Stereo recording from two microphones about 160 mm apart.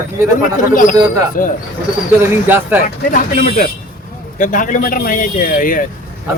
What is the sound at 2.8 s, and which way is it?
A man's voice, 55° left (ahead or behind).